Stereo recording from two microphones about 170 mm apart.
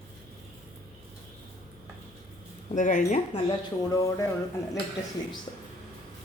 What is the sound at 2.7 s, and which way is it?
Speech, 45° left (ahead or behind).